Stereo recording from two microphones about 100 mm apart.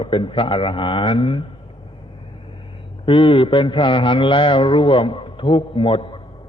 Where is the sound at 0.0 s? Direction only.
60° left (ahead or behind).